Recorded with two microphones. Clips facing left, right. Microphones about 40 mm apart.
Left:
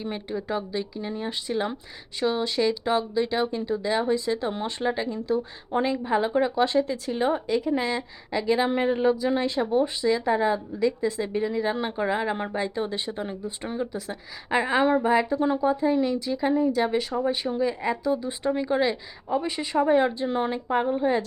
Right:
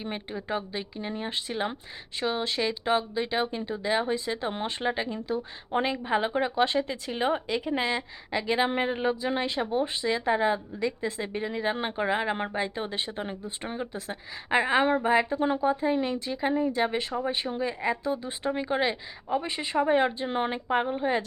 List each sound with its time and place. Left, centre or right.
0.0 s speech: right
7.4 s speech: right
7.7 s speech: right